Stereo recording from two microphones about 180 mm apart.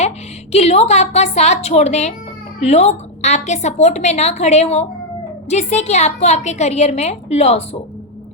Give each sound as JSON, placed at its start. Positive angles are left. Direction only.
{"t": 0.5, "sound": "a woman's voice", "side_deg": 35}